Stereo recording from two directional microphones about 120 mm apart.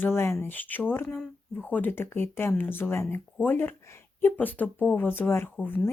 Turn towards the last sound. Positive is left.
turn(degrees=15)  # may be behind; listen again after turning